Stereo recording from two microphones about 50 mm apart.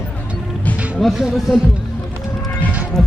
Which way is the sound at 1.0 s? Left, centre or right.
Centre.